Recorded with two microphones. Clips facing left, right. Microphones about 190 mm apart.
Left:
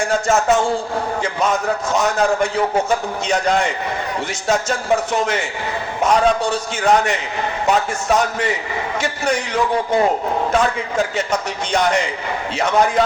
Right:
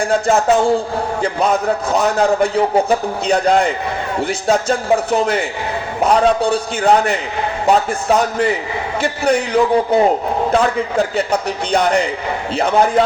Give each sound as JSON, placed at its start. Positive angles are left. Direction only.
{"t": 0.0, "sound": "a man's voice", "side_deg": -35}